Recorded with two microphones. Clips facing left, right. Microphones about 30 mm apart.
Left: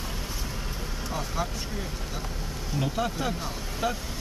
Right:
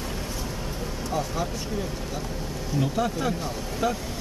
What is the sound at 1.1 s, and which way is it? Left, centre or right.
Speech, centre.